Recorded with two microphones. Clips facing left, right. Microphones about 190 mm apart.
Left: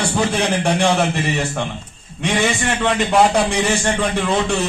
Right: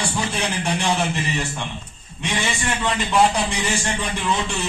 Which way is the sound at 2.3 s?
55° left (ahead or behind).